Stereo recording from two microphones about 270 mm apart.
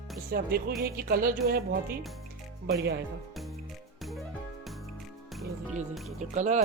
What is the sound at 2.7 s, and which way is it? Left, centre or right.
Speech, right.